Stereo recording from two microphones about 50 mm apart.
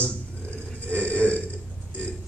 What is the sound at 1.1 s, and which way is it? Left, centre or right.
Burping, left.